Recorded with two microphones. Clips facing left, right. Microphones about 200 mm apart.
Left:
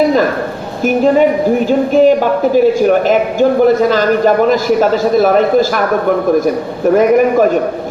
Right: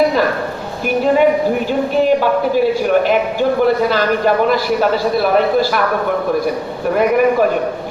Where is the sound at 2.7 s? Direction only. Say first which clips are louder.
Left 4 dB; 45° left (ahead or behind).